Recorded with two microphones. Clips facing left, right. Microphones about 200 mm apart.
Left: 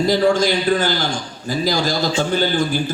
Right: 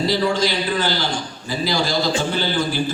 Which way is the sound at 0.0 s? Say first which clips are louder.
Left 4 dB; 50° left (ahead or behind).